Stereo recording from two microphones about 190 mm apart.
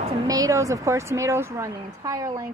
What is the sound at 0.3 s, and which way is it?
A woman's voice, 20° right (ahead or behind).